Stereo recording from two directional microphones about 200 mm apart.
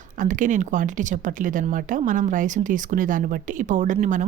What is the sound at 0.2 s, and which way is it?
Speech, 40° right (ahead or behind).